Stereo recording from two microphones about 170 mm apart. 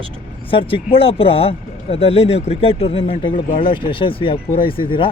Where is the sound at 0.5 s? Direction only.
35° left (ahead or behind).